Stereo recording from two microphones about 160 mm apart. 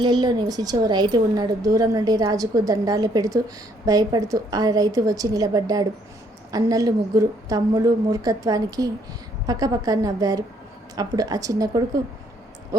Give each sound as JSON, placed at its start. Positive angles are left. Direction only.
{"t": 0.0, "sound": "a woman's voice", "side_deg": -25}